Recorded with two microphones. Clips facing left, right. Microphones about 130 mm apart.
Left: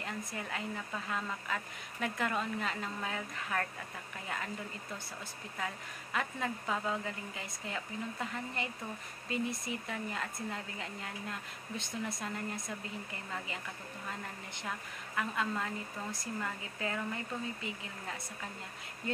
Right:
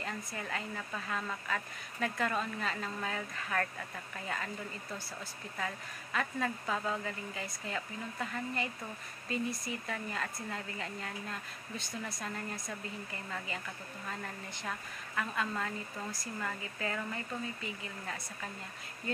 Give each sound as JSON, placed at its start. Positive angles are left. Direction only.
{"t": 0.0, "sound": "a woman's voice", "side_deg": 15}
{"t": 6.1, "sound": "a woman's voice", "side_deg": 15}
{"t": 15.1, "sound": "a woman's voice", "side_deg": 15}